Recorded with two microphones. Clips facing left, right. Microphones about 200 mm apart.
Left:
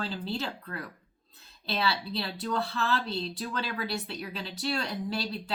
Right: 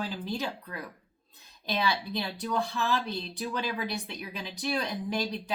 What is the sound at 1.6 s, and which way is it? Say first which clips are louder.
A woman's voice: right 1 dB; 15° right (ahead or behind).